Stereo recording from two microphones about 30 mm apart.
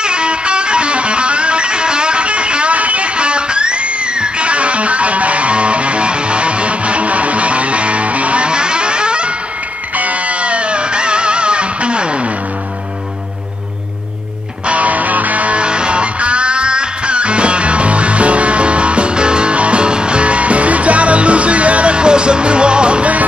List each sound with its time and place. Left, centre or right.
0.0 s music: right
3.2 s music: right
8.5 s music: right
9.9 s music: right
14.7 s music: right
15.6 s music: right